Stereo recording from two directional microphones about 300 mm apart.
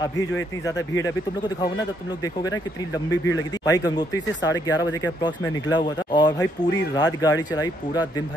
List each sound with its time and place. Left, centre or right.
1.0 s speech: centre
3.1 s speech: centre